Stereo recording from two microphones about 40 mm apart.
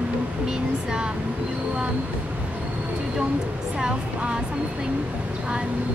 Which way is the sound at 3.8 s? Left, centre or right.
Right.